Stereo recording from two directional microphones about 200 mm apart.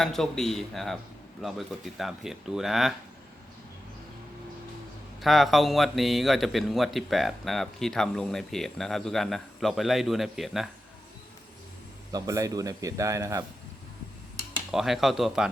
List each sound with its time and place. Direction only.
0.0 s a man's voice: centre (ahead or behind)
5.2 s a man's voice: centre (ahead or behind)
12.1 s speech: 15° right (ahead or behind)
14.7 s a man's voice: centre (ahead or behind)